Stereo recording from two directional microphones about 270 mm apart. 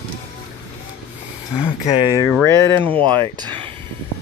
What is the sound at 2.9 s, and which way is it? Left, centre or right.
Speech, centre.